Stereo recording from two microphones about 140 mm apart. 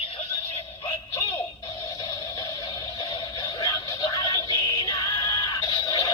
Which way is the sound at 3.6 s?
30° left (ahead or behind).